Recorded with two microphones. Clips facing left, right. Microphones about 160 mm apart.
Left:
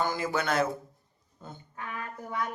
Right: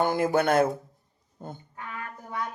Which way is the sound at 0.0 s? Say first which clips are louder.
Right 6 dB; 55° right (ahead or behind).